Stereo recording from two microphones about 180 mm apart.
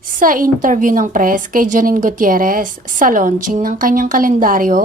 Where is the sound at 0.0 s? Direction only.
50° right (ahead or behind).